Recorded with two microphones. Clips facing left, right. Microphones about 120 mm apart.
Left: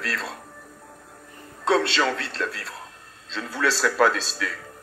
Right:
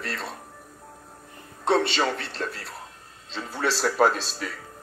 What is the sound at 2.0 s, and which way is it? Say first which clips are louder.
Speech: left 2 dB; 75° left (ahead or behind).